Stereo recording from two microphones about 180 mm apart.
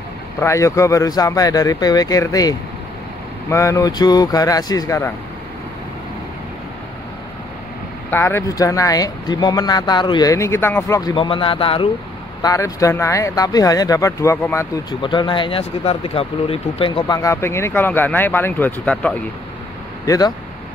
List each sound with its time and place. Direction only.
0.4 s speech: 15° left (ahead or behind)
8.1 s speech: 10° left (ahead or behind); by 11.9 s 30° left (ahead or behind)
12.4 s speech: 20° left (ahead or behind)
15.0 s speech: 25° left (ahead or behind); by 19.1 s 10° left (ahead or behind)
20.1 s speech: 20° left (ahead or behind)